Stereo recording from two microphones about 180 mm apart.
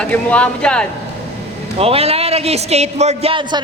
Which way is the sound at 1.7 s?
35° right (ahead or behind).